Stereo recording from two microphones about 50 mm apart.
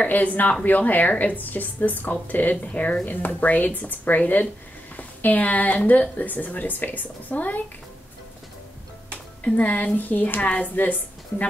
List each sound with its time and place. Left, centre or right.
0.0 s a woman's voice: left
9.4 s a woman's voice: left